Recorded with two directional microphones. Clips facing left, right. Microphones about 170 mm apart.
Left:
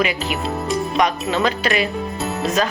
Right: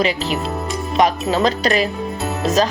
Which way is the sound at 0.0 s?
35° right (ahead or behind).